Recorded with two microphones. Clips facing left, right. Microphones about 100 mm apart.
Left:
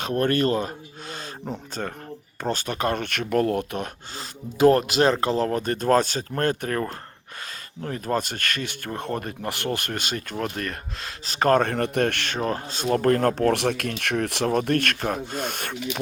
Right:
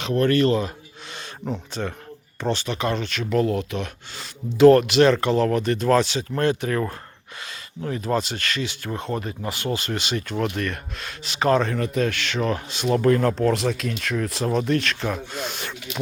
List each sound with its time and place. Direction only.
0.0 s speech: 45° left (ahead or behind)
12.4 s speech: 35° left (ahead or behind)